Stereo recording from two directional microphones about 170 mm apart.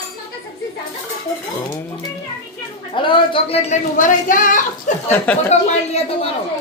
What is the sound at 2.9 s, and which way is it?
Speech, 30° left (ahead or behind).